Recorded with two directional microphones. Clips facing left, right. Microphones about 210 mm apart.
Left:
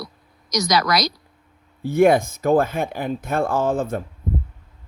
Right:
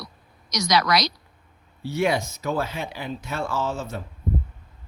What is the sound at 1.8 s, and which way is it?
Speech, 50° left (ahead or behind).